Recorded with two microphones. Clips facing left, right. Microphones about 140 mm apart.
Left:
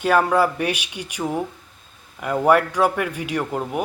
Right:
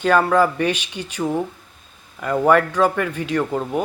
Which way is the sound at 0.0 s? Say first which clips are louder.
Right 2 dB; 10° left (ahead or behind).